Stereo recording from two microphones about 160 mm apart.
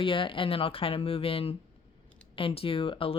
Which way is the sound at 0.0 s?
30° left (ahead or behind).